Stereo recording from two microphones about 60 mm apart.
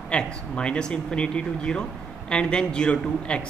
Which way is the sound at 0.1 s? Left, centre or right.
Centre.